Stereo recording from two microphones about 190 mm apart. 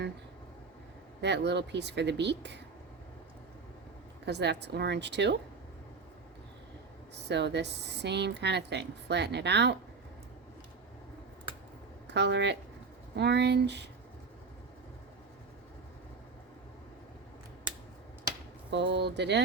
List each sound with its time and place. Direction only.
1.2 s speech: 65° right (ahead or behind)
4.3 s speech: 65° right (ahead or behind)
7.3 s speech: 65° right (ahead or behind)
12.0 s speech: 65° right (ahead or behind)
18.7 s speech: 70° right (ahead or behind)